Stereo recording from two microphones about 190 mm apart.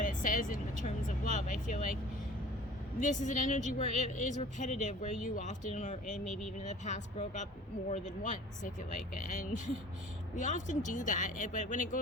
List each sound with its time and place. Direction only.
0.0 s speech: 45° left (ahead or behind)
3.0 s a woman's voice: 40° left (ahead or behind)